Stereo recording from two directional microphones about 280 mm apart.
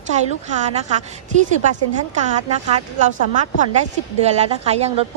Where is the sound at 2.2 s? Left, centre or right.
Right.